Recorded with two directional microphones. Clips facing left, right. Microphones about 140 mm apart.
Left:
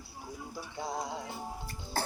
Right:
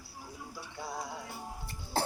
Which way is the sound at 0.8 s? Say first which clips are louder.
Left 4 dB; 15° left (ahead or behind).